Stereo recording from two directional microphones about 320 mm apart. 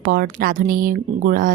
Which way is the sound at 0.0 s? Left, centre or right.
Right.